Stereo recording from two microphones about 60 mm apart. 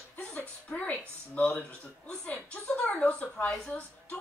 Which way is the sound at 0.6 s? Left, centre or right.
Left.